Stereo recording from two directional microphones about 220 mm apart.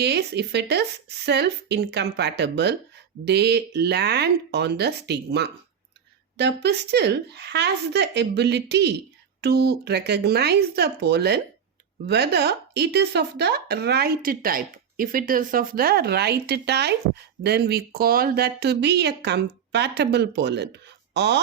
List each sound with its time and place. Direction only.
0.0 s speech: 50° right (ahead or behind)